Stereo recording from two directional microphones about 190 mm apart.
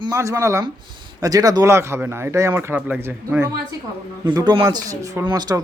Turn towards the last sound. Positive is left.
turn(degrees=-20)  # may be behind; listen again after turning